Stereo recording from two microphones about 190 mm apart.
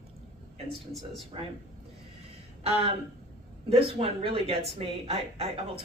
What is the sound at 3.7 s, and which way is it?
Speech, 30° right (ahead or behind).